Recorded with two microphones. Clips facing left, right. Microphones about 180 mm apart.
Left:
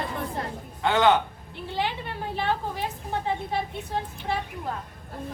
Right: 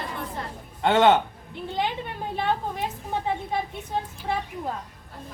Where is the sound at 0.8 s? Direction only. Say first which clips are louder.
Right 2 dB; 25° right (ahead or behind).